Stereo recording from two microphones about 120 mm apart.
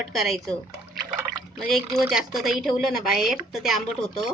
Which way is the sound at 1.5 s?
Centre (ahead or behind).